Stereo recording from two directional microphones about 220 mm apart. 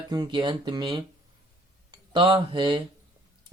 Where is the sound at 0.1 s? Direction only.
20° right (ahead or behind).